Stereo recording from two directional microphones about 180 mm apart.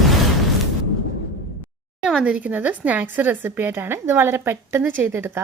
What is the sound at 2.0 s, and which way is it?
Speech, 5° right (ahead or behind).